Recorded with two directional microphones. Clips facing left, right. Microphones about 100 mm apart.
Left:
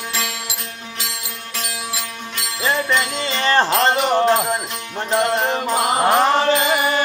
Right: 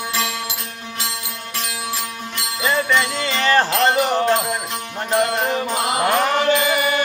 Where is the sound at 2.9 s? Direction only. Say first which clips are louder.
Right 1 dB; 30° left (ahead or behind).